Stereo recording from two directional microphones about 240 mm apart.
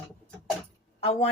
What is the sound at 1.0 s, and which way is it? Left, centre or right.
Speech, left.